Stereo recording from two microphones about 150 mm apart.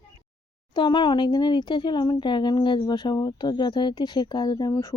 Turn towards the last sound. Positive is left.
turn(degrees=20)  # may be behind; listen again after turning